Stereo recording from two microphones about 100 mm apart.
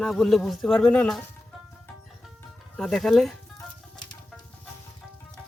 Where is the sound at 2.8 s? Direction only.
Centre (ahead or behind).